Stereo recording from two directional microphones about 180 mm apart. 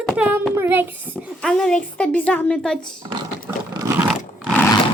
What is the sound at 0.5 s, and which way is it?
Child singing, 10° right (ahead or behind).